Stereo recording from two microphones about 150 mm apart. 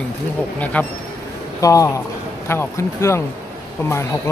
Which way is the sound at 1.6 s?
20° left (ahead or behind).